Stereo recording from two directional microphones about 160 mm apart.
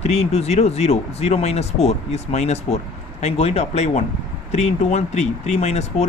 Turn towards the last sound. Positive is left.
turn(degrees=45)  # may be behind; listen again after turning